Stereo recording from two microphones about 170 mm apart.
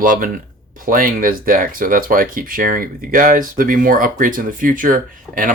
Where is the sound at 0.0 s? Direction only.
50° right (ahead or behind).